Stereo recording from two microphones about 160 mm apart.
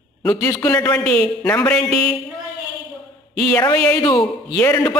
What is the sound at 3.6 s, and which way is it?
Speech, 25° left (ahead or behind).